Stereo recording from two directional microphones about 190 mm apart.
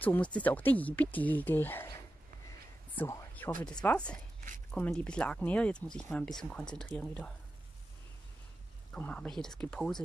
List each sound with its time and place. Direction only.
0.0 s speech: 10° left (ahead or behind)
3.0 s a sound: 10° left (ahead or behind)
3.6 s speech: 5° left (ahead or behind)
8.9 s speech: 5° left (ahead or behind)